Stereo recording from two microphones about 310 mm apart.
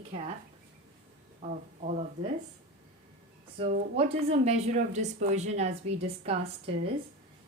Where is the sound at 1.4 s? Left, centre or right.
Right.